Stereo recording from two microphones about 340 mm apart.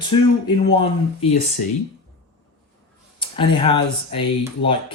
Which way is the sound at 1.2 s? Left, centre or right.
Left.